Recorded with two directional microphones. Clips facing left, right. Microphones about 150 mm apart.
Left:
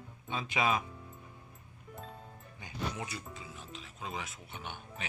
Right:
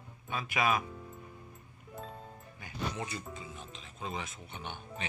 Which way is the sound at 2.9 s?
5° left (ahead or behind).